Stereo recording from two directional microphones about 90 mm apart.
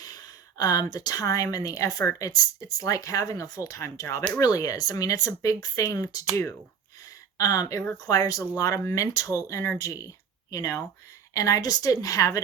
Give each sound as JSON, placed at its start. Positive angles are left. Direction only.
{"t": 0.0, "sound": "speech", "side_deg": 45}
{"t": 7.3, "sound": "speech", "side_deg": 40}